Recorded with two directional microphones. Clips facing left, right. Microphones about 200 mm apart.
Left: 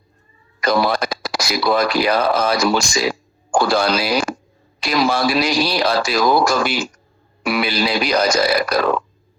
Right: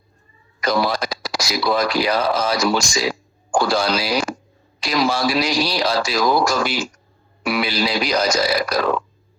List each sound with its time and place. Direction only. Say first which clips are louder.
0.6 s speech: left 2 dB; 60° left (ahead or behind)